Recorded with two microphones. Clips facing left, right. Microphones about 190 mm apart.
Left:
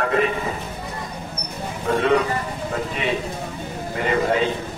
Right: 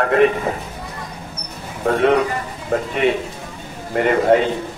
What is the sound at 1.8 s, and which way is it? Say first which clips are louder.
Speech: right 3 dB; 60° right (ahead or behind).